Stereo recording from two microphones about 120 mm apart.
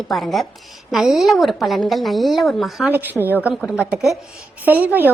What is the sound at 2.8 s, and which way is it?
Speech, 15° right (ahead or behind).